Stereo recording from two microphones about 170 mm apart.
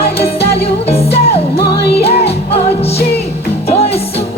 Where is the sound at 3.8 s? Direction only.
35° left (ahead or behind).